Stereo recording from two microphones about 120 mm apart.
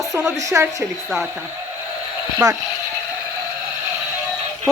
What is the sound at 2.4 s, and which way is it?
Speech, 30° right (ahead or behind).